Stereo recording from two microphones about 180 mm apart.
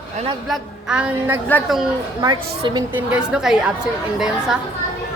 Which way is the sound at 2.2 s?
25° right (ahead or behind).